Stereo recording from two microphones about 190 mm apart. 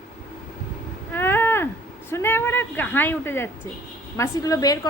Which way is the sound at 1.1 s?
10° left (ahead or behind).